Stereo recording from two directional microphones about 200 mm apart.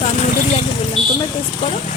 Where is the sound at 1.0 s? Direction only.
Centre (ahead or behind).